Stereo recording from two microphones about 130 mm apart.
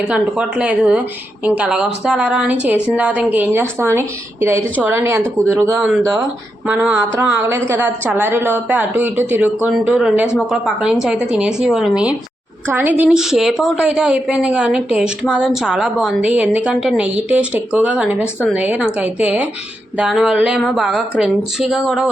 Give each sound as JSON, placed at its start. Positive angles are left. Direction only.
{"t": 0.1, "sound": "a woman's voice", "side_deg": -10}
{"t": 12.6, "sound": "a woman's voice", "side_deg": -15}